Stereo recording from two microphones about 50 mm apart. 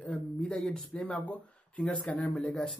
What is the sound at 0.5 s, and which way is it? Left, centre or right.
Speech, centre.